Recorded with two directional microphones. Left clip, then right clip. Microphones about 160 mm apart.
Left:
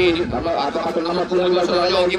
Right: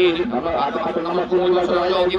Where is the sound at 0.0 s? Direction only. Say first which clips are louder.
Even; 20° right (ahead or behind).